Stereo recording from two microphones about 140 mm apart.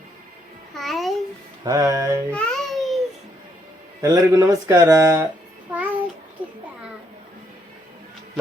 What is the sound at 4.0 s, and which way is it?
Speech, 25° right (ahead or behind).